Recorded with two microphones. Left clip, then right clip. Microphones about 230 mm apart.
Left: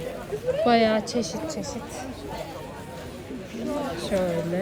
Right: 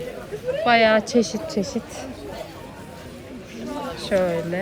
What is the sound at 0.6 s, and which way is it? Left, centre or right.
Speech, centre.